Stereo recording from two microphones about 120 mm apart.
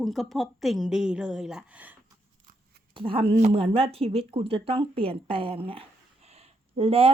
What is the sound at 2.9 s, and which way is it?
Speech, 50° right (ahead or behind).